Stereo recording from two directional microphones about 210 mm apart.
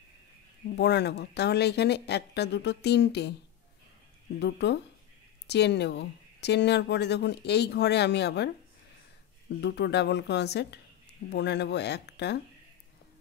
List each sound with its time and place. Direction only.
0.7 s speech: 55° left (ahead or behind)
4.4 s speech: 55° left (ahead or behind)
9.6 s speech: 55° left (ahead or behind)